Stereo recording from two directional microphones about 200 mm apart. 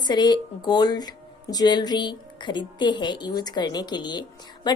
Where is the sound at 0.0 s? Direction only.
20° left (ahead or behind).